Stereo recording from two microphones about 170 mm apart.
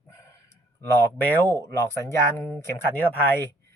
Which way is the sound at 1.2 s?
10° left (ahead or behind).